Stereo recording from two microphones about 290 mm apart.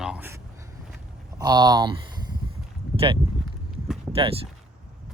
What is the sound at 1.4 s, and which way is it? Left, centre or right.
Speech, centre.